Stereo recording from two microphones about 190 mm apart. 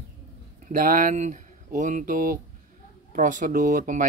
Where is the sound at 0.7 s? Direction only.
45° right (ahead or behind).